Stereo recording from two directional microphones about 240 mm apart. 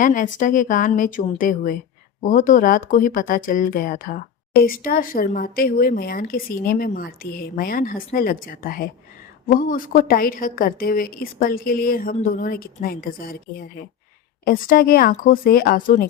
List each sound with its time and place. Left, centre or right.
0.0 s speech: left